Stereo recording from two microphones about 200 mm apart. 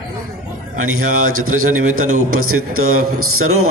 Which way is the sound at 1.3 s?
90° right.